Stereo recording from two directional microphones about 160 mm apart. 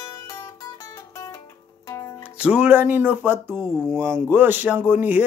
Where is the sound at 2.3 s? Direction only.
5° right (ahead or behind).